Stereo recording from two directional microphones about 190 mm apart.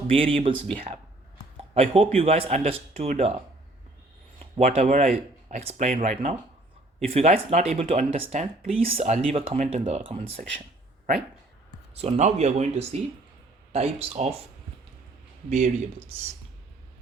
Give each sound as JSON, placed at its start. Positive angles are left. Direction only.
{"t": 0.1, "sound": "speech", "side_deg": -30}
{"t": 1.7, "sound": "speech", "side_deg": -30}
{"t": 4.5, "sound": "speech", "side_deg": -35}
{"t": 11.9, "sound": "speech", "side_deg": -35}
{"t": 15.4, "sound": "speech", "side_deg": -35}